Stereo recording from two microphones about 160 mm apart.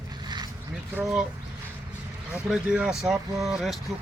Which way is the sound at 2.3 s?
5° right (ahead or behind).